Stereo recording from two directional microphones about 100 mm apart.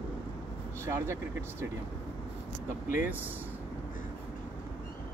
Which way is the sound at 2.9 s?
20° right (ahead or behind).